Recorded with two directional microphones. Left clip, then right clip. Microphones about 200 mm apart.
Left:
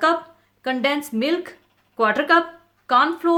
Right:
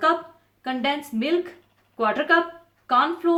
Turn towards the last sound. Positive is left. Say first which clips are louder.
# left 3 dB
turn(degrees=50)  # may be behind; listen again after turning